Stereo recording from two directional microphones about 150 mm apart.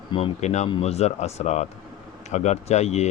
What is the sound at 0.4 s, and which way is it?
Speech, 50° left (ahead or behind).